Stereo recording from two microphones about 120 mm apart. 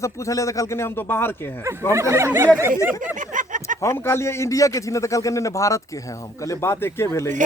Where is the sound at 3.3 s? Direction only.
90° right.